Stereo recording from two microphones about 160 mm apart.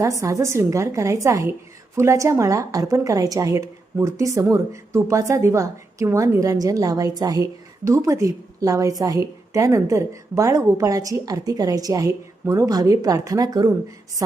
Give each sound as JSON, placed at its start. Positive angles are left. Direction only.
{"t": 0.2, "sound": "a woman's voice", "side_deg": -20}